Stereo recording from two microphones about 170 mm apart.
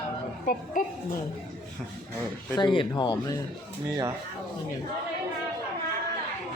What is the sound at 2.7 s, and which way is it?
Speech, 25° left (ahead or behind).